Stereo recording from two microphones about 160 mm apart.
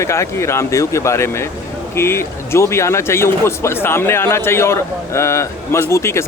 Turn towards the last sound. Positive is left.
turn(degrees=15)  # may be behind; listen again after turning